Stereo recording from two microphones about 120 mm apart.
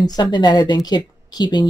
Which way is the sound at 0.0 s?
35° left (ahead or behind).